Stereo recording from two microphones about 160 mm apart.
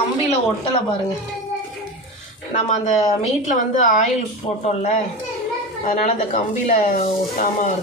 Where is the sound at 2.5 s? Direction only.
50° left (ahead or behind).